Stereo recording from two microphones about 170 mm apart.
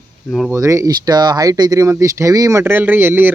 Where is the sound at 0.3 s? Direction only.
Centre (ahead or behind).